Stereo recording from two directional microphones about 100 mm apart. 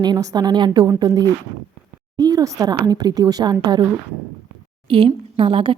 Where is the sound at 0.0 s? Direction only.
40° right (ahead or behind).